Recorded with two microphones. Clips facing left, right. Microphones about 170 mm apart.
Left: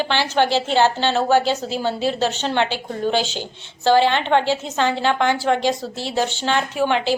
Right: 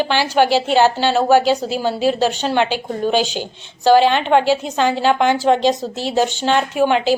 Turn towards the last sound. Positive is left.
turn(degrees=-15)  # may be behind; listen again after turning